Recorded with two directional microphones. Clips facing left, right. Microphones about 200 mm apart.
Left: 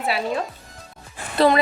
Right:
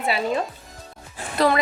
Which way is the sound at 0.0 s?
Centre (ahead or behind).